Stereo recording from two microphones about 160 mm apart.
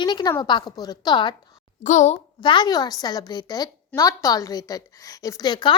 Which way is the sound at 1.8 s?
45° left (ahead or behind).